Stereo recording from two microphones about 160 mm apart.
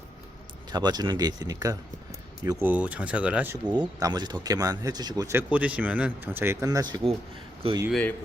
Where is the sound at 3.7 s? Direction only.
25° right (ahead or behind).